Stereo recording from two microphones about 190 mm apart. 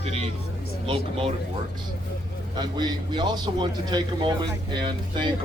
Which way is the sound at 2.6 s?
20° right (ahead or behind).